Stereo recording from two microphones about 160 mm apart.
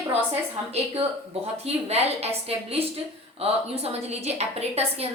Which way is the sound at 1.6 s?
40° right (ahead or behind).